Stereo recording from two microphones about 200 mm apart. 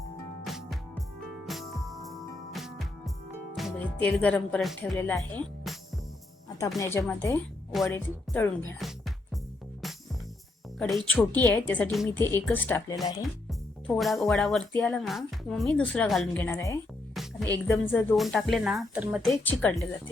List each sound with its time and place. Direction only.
0.4 s music: centre (ahead or behind)
3.5 s speech: centre (ahead or behind)
6.7 s speech: 10° left (ahead or behind)
8.8 s music: centre (ahead or behind)
10.8 s a woman's voice: 5° left (ahead or behind); by 13.1 s 20° left (ahead or behind)
13.5 s a woman's voice: 5° left (ahead or behind)
19.3 s speech: 10° left (ahead or behind)